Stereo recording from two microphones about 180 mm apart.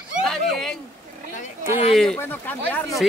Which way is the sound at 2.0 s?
5° left (ahead or behind).